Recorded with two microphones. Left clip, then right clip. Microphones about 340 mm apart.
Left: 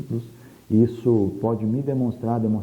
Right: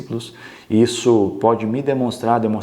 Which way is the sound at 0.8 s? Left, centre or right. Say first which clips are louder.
Right 5 dB; centre.